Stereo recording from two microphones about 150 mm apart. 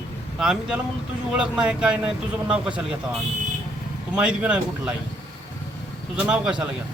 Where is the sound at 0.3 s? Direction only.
5° right (ahead or behind).